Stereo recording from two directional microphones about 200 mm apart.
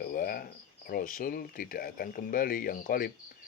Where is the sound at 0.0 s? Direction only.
45° left (ahead or behind).